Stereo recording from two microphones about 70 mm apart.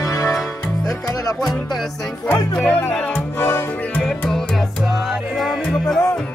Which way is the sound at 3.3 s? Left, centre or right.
Left.